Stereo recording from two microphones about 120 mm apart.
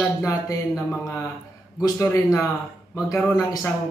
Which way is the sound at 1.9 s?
25° left (ahead or behind).